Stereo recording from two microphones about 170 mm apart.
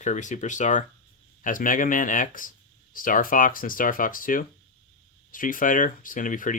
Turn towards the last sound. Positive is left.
turn(degrees=50)  # may be behind; listen again after turning